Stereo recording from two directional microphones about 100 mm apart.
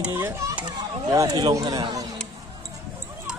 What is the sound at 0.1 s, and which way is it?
Speech, 25° right (ahead or behind).